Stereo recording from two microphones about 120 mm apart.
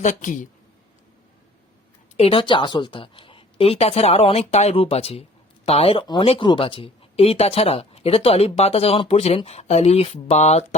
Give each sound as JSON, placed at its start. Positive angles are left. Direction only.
{"t": 0.0, "sound": "a woman's voice", "side_deg": 90}
{"t": 2.1, "sound": "a woman's voice", "side_deg": 50}